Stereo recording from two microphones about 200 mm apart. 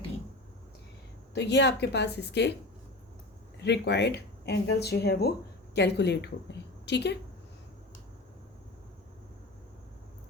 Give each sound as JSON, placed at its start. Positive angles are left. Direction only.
{"t": 1.3, "sound": "speech", "side_deg": 60}
{"t": 3.6, "sound": "speech", "side_deg": 60}